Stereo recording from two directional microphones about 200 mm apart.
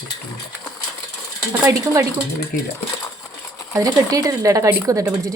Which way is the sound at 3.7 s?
15° right (ahead or behind).